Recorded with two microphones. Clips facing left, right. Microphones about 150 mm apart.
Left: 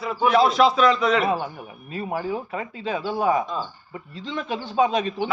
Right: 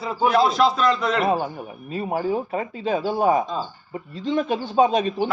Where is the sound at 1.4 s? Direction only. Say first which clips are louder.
Right 4 dB; 25° right (ahead or behind).